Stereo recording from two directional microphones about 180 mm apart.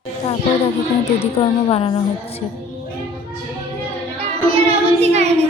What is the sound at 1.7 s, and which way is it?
Speech, 30° left (ahead or behind).